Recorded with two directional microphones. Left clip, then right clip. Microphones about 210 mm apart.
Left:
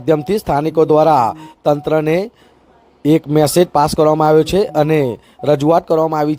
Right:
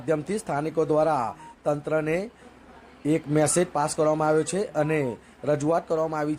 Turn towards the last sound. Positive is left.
turn(degrees=35)  # may be behind; listen again after turning